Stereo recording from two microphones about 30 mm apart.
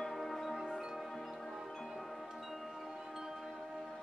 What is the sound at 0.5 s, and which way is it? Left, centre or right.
Wind chime, centre.